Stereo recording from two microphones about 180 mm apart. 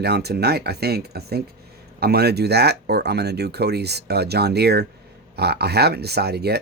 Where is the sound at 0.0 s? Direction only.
65° right (ahead or behind).